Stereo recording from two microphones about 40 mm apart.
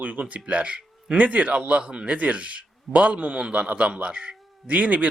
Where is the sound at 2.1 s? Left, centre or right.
Right.